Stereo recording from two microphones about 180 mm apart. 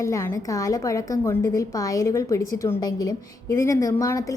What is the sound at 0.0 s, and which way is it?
A woman's voice, 15° left (ahead or behind).